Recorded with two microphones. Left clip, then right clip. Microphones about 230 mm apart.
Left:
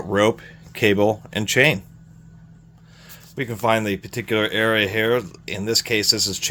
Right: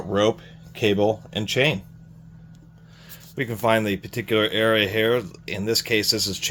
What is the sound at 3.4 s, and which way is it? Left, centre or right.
Speech, centre.